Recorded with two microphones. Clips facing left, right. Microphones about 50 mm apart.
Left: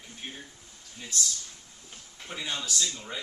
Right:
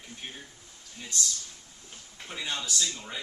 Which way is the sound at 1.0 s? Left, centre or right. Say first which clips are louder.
Even; centre.